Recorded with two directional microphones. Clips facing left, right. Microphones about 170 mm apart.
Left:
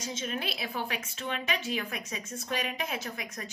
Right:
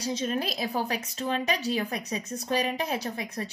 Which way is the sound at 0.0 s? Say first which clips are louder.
Right 6 dB; 35° right (ahead or behind).